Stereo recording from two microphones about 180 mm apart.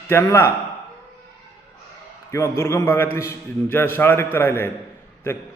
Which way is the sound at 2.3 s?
15° left (ahead or behind).